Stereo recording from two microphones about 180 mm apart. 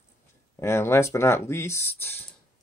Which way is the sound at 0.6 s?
15° left (ahead or behind).